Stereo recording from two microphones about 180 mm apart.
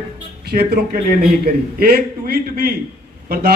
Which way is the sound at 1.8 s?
60° right (ahead or behind).